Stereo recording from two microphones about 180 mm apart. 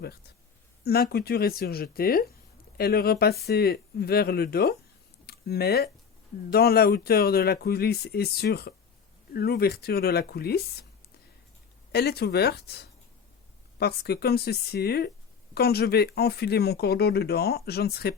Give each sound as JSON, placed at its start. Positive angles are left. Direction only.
{"t": 0.9, "sound": "speech", "side_deg": 60}
{"t": 11.9, "sound": "speech", "side_deg": 65}